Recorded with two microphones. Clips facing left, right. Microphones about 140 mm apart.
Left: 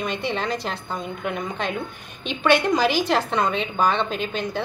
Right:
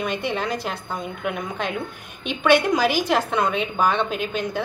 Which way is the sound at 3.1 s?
5° right (ahead or behind).